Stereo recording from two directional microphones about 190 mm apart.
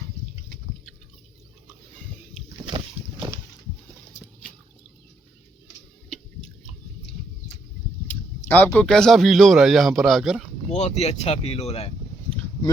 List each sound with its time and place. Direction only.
2.6 s boat: 30° right (ahead or behind)
8.0 s speech: 10° left (ahead or behind)
10.7 s speech: 35° left (ahead or behind)